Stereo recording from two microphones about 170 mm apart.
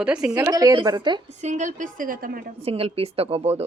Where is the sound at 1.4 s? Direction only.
45° right (ahead or behind).